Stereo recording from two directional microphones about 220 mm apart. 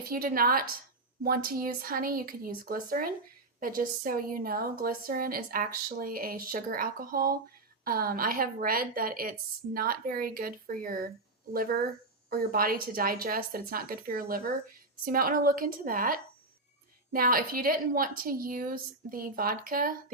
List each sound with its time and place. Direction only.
0.1 s a woman's voice: 40° right (ahead or behind)
12.3 s a woman's voice: 40° right (ahead or behind)